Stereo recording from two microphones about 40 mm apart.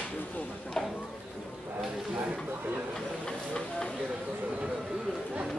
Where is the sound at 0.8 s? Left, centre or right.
Centre.